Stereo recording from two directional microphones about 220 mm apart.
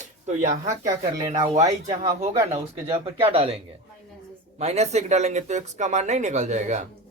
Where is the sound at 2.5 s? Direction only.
25° right (ahead or behind).